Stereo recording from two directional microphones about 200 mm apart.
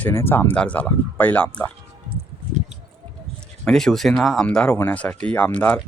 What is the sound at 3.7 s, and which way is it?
Speech, centre (ahead or behind).